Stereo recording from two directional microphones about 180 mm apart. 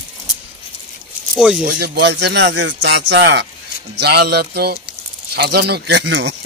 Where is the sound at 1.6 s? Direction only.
60° right (ahead or behind).